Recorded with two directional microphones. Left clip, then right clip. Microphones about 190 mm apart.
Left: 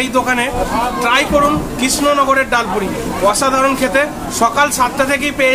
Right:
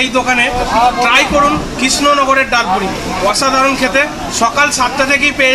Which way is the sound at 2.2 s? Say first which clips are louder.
Right 2 dB; 15° left (ahead or behind).